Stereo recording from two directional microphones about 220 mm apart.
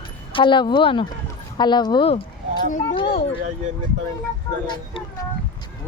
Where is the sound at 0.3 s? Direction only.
20° left (ahead or behind).